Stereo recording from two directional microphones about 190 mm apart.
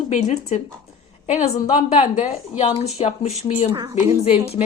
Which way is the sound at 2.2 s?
35° left (ahead or behind).